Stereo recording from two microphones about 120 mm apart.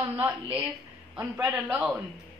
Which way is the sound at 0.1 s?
10° right (ahead or behind).